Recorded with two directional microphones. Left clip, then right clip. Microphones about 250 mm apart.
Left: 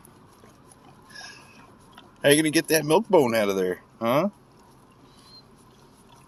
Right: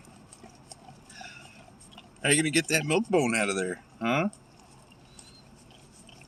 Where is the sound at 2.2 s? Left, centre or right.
Left.